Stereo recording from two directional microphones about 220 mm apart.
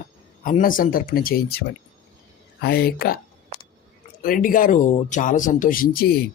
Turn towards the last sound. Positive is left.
turn(degrees=45)  # may be behind; listen again after turning